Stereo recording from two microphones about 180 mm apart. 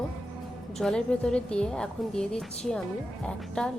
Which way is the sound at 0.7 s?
5° left (ahead or behind).